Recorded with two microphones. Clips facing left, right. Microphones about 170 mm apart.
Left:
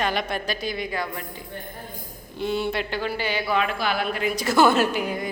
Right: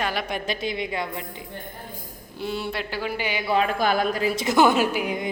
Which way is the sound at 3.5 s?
35° right (ahead or behind).